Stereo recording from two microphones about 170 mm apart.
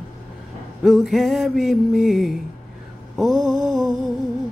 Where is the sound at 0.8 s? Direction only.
Centre (ahead or behind).